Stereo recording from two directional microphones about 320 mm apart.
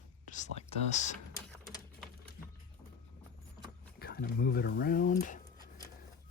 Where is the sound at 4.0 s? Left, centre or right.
Left.